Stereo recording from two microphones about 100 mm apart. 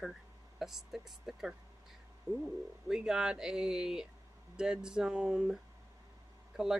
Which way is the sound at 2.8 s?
5° right (ahead or behind).